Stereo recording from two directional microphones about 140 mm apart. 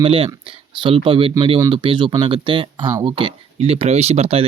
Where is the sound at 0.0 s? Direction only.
40° right (ahead or behind).